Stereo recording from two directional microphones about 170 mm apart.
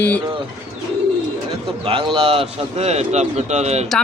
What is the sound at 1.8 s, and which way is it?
Speech, 35° right (ahead or behind).